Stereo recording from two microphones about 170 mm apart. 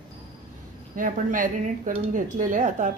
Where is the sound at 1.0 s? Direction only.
50° right (ahead or behind).